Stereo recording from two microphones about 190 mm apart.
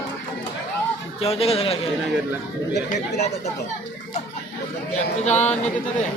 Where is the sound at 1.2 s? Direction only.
30° left (ahead or behind).